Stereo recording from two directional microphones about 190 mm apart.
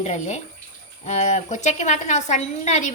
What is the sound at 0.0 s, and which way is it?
A woman's voice, 35° left (ahead or behind).